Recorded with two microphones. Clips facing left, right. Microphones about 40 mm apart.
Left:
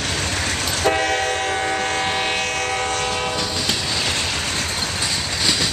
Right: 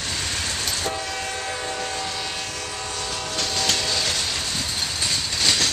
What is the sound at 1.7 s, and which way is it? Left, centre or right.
Train, left.